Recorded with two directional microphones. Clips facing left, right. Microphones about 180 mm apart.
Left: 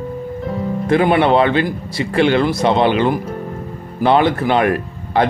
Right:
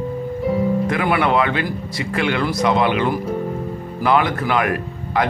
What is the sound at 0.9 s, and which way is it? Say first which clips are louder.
Speech: left 5 dB; 30° left (ahead or behind).